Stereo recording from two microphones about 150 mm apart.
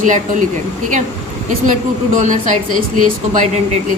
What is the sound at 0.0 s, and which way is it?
Speech, 60° right (ahead or behind).